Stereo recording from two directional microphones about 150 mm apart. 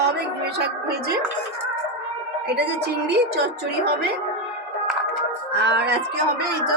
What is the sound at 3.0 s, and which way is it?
A woman's voice, 90° right.